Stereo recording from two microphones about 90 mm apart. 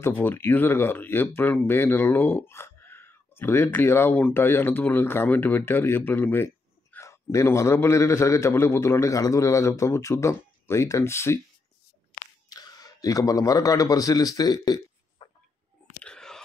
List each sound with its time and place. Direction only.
0.0 s speech: 25° left (ahead or behind)
12.4 s a man's voice: 45° left (ahead or behind)
15.2 s a sound: 65° left (ahead or behind)
16.0 s whispering: 10° left (ahead or behind)